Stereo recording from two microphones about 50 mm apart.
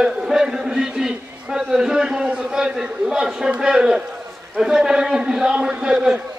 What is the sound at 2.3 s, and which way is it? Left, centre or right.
A man's voice, centre.